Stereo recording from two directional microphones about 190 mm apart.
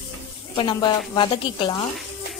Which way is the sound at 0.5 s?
25° left (ahead or behind).